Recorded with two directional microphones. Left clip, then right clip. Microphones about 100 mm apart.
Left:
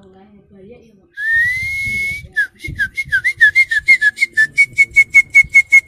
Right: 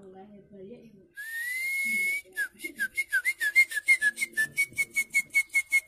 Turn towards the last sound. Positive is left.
turn(degrees=-20)  # may be behind; listen again after turning